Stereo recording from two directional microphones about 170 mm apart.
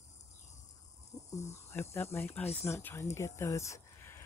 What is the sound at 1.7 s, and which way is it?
Speech, 15° left (ahead or behind).